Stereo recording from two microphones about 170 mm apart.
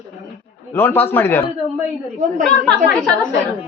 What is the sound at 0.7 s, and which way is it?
Speech, 15° left (ahead or behind).